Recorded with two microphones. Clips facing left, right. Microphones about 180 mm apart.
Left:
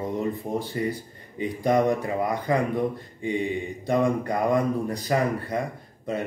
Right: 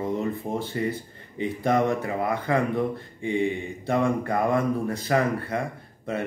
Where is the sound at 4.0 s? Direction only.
15° left (ahead or behind).